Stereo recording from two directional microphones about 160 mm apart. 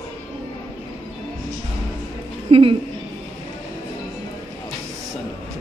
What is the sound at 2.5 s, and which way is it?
Speech, 35° right (ahead or behind).